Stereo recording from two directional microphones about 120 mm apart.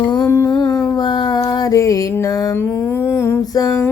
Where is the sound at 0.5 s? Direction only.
35° left (ahead or behind).